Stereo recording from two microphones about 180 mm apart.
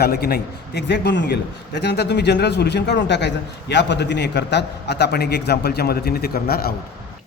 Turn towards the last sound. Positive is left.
turn(degrees=60)  # may be behind; listen again after turning